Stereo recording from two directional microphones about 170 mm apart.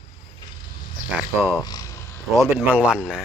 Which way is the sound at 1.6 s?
20° left (ahead or behind).